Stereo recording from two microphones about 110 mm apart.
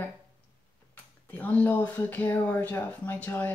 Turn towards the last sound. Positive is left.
turn(degrees=15)  # may be behind; listen again after turning